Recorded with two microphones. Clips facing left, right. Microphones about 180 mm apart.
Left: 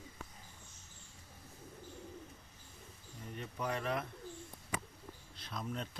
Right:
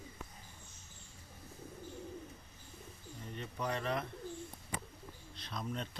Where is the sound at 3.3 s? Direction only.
5° left (ahead or behind).